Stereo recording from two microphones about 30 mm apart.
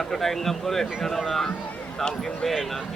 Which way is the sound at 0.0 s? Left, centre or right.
Centre.